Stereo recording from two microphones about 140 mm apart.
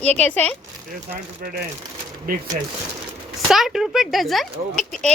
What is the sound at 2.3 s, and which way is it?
Speech, 90° right.